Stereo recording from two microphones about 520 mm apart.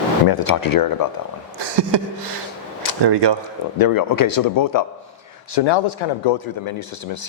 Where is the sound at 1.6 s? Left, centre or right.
Right.